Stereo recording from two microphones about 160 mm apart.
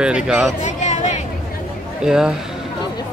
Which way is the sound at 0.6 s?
45° left (ahead or behind).